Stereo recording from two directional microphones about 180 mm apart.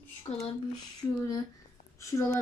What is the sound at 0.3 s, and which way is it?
Speech, 35° left (ahead or behind).